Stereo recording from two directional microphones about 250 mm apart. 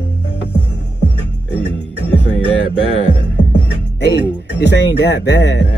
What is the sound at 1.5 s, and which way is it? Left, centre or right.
Music, right.